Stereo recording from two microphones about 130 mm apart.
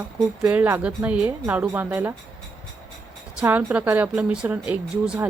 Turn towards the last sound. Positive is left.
turn(degrees=-10)  # may be behind; listen again after turning